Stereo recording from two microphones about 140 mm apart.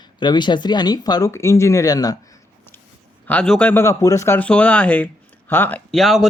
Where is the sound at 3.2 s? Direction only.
10° left (ahead or behind).